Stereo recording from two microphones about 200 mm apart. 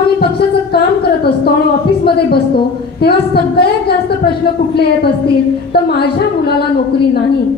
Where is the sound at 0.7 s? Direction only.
55° left (ahead or behind).